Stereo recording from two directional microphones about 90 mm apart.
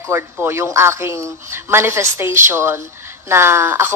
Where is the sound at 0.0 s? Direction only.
30° right (ahead or behind).